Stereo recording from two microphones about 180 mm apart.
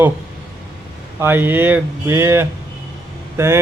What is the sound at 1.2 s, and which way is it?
Speech, 10° right (ahead or behind).